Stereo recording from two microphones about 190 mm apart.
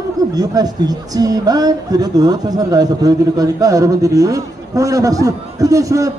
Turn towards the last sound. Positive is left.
turn(degrees=-15)  # may be behind; listen again after turning